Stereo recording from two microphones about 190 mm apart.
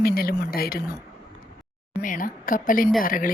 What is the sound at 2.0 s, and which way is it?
Speech, 45° left (ahead or behind).